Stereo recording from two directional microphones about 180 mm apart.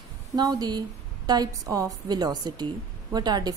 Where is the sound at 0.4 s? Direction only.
20° right (ahead or behind).